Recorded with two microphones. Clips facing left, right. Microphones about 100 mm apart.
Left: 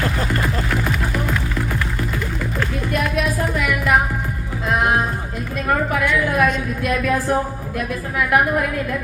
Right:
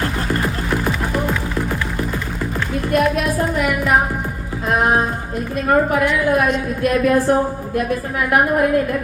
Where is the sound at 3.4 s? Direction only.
35° right (ahead or behind).